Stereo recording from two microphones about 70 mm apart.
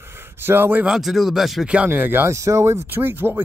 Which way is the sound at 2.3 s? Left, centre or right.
Right.